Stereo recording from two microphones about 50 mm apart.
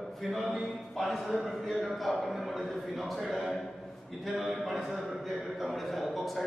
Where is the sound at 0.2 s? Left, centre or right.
Centre.